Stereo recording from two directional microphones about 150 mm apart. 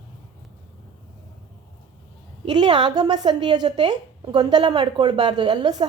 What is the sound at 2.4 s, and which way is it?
A woman's voice, 30° right (ahead or behind).